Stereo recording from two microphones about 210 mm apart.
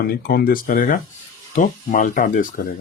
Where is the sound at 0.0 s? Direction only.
45° left (ahead or behind).